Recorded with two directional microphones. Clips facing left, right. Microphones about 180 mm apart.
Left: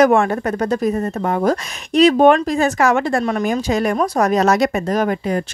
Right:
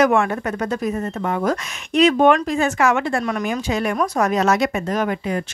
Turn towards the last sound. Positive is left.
turn(degrees=40)  # may be behind; listen again after turning